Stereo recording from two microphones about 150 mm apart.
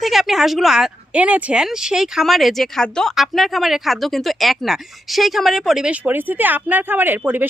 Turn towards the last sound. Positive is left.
turn(degrees=-10)  # may be behind; listen again after turning